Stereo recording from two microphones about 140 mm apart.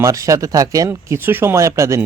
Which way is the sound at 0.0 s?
25° right (ahead or behind).